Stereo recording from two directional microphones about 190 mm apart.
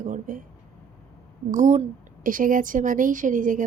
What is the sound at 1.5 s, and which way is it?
Speech, 40° right (ahead or behind).